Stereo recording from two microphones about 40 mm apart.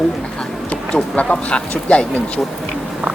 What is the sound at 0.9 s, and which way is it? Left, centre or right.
Speech, left.